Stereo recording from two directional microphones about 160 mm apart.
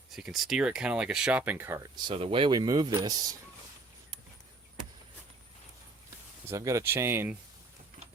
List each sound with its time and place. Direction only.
0.2 s speech: 5° right (ahead or behind)
2.0 s speech: 35° right (ahead or behind)
6.5 s speech: 20° right (ahead or behind)